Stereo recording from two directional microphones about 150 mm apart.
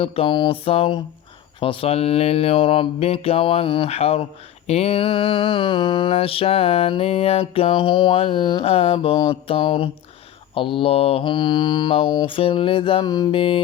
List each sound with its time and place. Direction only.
0.0 s speech: 35° left (ahead or behind)